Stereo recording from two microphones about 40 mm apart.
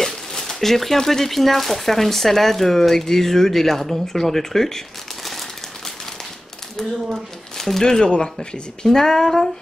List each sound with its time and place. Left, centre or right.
0.0 s speech: centre
7.5 s a sound: centre
7.8 s speech: centre